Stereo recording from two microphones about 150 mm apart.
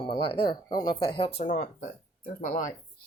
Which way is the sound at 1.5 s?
55° left (ahead or behind).